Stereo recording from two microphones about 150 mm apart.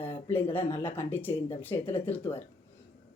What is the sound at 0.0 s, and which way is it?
Speech, 15° left (ahead or behind).